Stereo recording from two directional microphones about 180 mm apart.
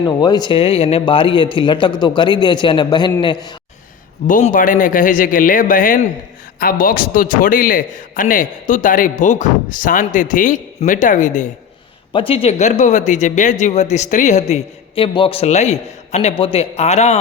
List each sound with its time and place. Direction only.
0.0 s a man's voice: 25° left (ahead or behind)
4.3 s speech: 45° left (ahead or behind)
12.1 s speech: 30° left (ahead or behind)